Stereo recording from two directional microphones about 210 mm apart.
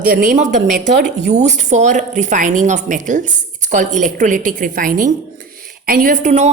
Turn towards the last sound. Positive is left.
turn(degrees=-35)  # may be behind; listen again after turning